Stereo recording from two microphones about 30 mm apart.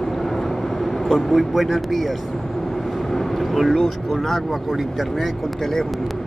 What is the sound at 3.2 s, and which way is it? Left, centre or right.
Speech, centre.